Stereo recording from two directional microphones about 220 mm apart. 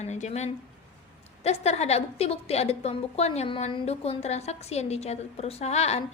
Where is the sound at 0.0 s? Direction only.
30° left (ahead or behind).